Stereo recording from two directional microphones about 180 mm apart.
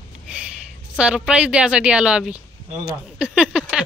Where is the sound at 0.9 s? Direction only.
5° right (ahead or behind).